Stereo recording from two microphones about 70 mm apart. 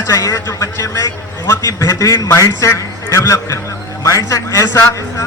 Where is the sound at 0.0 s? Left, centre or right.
Left.